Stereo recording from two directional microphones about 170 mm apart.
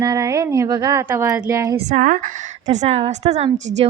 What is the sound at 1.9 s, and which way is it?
A woman's voice, 50° right (ahead or behind).